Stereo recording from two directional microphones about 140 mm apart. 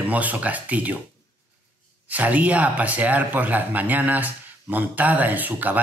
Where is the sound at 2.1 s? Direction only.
10° right (ahead or behind).